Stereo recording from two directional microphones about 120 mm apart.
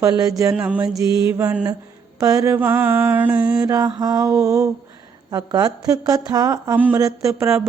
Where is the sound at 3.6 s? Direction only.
30° right (ahead or behind).